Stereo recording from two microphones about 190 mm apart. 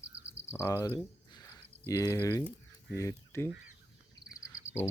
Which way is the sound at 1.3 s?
20° left (ahead or behind).